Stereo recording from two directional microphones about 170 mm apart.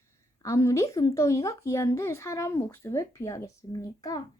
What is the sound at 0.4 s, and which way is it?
Speech, 20° left (ahead or behind).